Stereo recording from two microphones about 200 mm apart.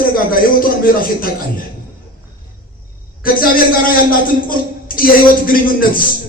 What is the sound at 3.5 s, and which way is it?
Speech, 45° left (ahead or behind).